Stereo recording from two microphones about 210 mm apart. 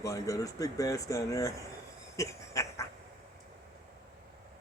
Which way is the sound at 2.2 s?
15° left (ahead or behind).